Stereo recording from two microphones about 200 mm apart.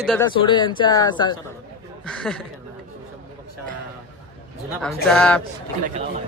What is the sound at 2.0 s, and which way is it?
Speech, 5° left (ahead or behind).